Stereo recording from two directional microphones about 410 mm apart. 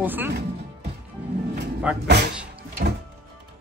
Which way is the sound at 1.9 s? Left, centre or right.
Centre.